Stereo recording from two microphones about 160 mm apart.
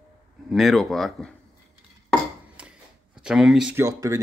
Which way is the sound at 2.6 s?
10° right (ahead or behind).